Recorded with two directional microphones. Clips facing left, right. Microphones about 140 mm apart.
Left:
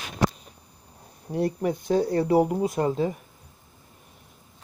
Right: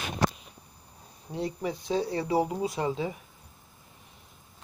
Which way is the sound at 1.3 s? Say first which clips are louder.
Left 6 dB; 55° left (ahead or behind).